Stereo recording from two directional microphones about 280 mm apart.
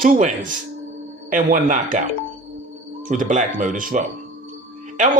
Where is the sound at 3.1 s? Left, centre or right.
Right.